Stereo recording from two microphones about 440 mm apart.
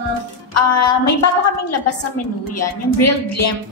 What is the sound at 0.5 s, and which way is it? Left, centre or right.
A woman's voice, left.